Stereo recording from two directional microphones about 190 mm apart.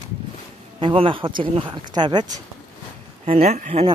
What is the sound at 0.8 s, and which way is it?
Speech, 30° right (ahead or behind).